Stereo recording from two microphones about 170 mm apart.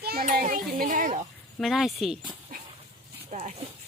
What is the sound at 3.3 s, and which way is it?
Speech, 40° right (ahead or behind).